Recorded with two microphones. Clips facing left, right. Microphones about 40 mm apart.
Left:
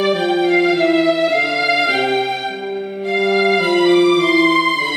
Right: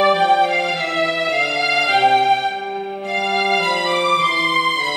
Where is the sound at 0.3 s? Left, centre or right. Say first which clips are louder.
Left 1 dB; centre.